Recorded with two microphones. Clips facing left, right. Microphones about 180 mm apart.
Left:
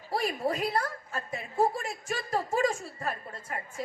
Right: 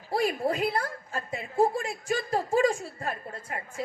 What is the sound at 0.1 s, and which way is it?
A woman's voice, 30° right (ahead or behind).